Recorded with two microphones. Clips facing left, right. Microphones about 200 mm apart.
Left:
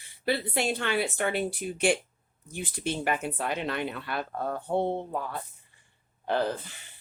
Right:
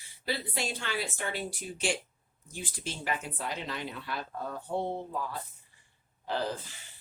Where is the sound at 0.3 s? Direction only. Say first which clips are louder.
Left 7 dB; 60° left (ahead or behind).